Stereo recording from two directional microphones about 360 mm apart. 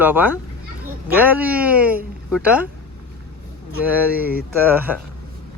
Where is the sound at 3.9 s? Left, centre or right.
Centre.